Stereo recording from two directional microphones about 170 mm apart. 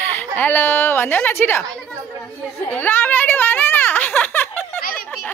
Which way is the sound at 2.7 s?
10° left (ahead or behind).